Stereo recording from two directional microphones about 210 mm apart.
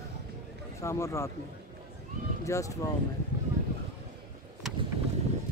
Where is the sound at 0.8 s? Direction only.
15° left (ahead or behind).